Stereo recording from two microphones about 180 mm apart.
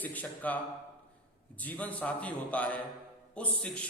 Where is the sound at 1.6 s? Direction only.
10° left (ahead or behind).